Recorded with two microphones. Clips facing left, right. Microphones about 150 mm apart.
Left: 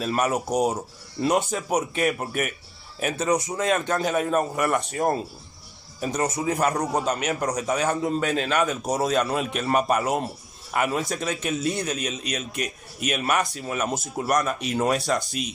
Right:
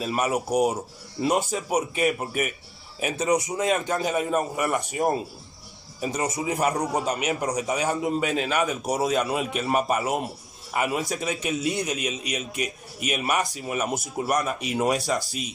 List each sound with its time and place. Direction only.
0.0 s a man's voice: 5° right (ahead or behind)
3.3 s a man's voice: 20° right (ahead or behind)
3.6 s a man's voice: 5° right (ahead or behind)
13.5 s a man's voice: 15° right (ahead or behind)
13.8 s speech: 20° left (ahead or behind)
14.1 s a man's voice: 5° right (ahead or behind)